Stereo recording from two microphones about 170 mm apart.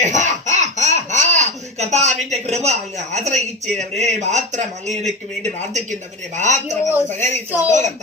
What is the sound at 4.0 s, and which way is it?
Speech, 40° right (ahead or behind).